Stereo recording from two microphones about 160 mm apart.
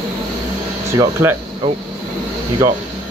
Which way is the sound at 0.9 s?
15° right (ahead or behind).